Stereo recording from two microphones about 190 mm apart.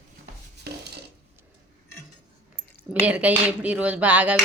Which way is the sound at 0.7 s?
60° right (ahead or behind).